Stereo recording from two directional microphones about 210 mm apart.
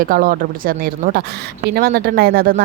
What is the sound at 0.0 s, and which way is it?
Speech, 45° right (ahead or behind).